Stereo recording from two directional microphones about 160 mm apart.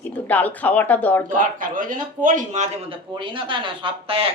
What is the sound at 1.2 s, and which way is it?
A man's voice, 55° right (ahead or behind).